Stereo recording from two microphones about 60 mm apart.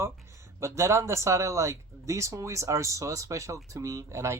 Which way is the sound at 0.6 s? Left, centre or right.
Right.